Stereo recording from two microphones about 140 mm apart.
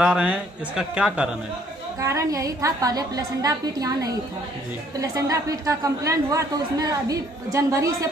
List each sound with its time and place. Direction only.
0.0 s speech: 10° right (ahead or behind)
2.0 s speech: 25° right (ahead or behind)
5.1 s speech: 25° right (ahead or behind)